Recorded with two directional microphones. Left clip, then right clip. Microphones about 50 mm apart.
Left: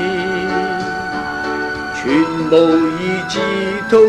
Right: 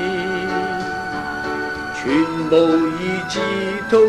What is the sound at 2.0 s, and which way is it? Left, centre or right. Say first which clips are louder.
Music: left 3 dB; right.